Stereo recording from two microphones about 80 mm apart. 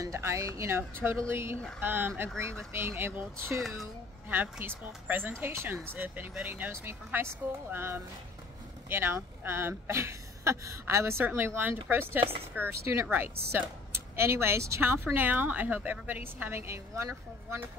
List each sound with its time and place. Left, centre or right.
0.0 s speech: right